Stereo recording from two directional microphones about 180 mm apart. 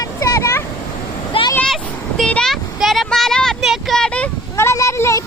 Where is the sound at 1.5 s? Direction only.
5° left (ahead or behind).